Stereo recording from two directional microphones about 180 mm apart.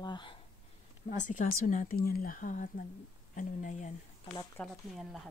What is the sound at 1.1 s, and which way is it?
A woman's voice, 45° left (ahead or behind).